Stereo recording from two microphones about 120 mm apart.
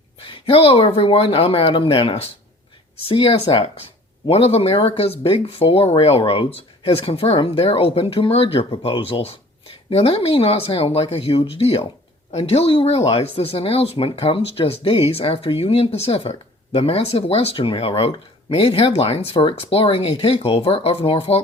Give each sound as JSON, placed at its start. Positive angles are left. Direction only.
{"t": 0.3, "sound": "speech", "side_deg": 45}